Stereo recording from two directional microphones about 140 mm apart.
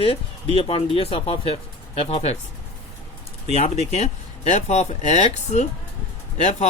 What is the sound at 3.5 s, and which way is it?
Speech, 50° left (ahead or behind).